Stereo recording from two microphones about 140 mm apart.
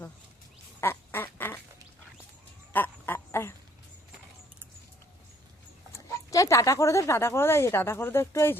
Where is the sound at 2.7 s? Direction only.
15° left (ahead or behind).